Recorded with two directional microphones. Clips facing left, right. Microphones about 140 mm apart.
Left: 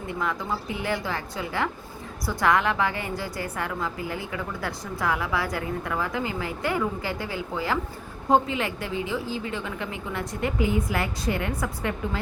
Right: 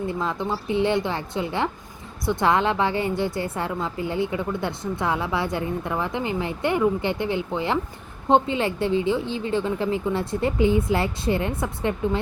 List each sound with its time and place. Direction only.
0.1 s a woman's voice: 30° right (ahead or behind)